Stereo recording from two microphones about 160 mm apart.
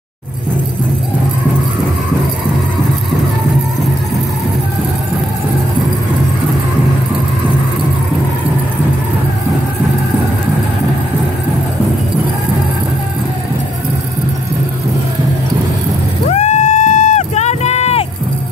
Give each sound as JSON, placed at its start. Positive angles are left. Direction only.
{"t": 16.3, "sound": "vehicle", "side_deg": 45}